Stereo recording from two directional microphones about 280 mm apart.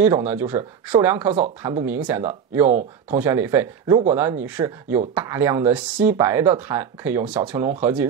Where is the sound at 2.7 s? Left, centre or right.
Right.